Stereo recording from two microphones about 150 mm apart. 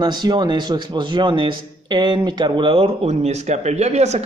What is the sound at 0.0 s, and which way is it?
A man's voice, 30° right (ahead or behind).